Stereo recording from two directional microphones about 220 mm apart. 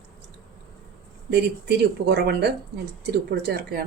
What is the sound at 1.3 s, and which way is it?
Speech, 50° right (ahead or behind).